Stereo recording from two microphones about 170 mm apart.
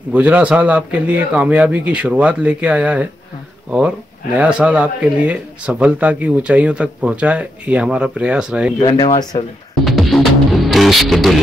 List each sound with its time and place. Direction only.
0.1 s speech: 10° right (ahead or behind)
4.4 s speech: 5° right (ahead or behind)
8.7 s speech: 25° left (ahead or behind)
9.8 s music: centre (ahead or behind)